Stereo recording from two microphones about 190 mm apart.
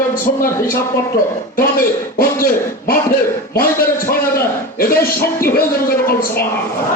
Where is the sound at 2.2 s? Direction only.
50° left (ahead or behind).